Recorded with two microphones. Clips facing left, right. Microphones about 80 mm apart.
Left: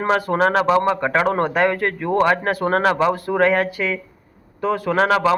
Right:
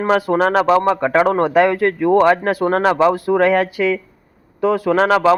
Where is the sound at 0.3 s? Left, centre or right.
Right.